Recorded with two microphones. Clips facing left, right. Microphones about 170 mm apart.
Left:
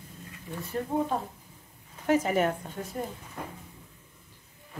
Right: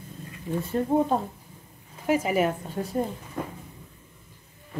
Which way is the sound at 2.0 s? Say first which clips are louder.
Right 1 dB; 10° right (ahead or behind).